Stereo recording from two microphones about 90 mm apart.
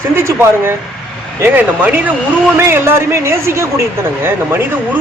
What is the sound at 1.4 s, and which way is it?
A man's voice, 20° right (ahead or behind).